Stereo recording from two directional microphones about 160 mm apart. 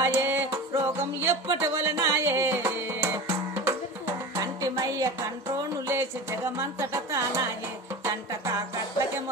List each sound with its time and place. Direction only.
0.0 s music: 15° right (ahead or behind)